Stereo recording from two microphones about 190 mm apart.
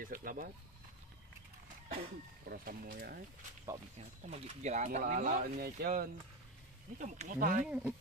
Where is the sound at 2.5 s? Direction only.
50° right (ahead or behind).